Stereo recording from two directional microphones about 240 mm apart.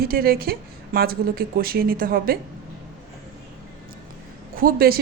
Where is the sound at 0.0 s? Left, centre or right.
Right.